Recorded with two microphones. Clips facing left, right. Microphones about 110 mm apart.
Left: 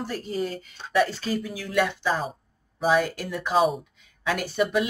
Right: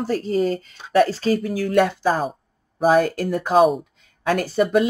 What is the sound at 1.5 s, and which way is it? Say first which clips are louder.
Speech: right 5 dB; 50° right (ahead or behind).